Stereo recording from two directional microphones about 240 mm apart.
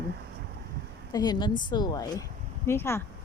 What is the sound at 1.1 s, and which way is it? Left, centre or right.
Speech, centre.